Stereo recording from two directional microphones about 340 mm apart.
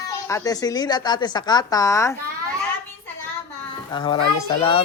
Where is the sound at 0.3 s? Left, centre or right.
Centre.